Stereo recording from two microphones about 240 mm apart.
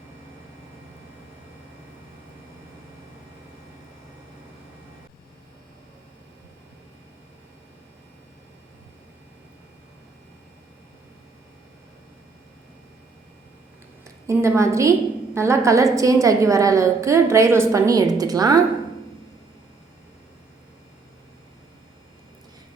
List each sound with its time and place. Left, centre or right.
14.3 s a woman's voice: centre